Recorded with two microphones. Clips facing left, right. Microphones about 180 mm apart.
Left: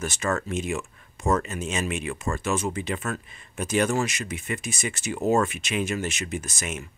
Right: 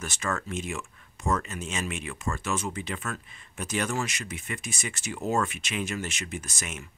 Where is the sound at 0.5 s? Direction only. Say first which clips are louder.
Left 5 dB; 20° left (ahead or behind).